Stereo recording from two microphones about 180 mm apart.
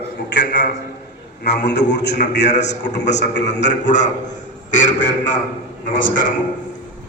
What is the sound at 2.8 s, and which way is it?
Speech, 70° left (ahead or behind).